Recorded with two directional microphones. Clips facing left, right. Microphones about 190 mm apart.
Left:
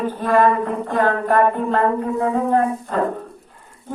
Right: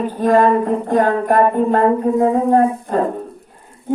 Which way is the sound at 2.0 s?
30° right (ahead or behind).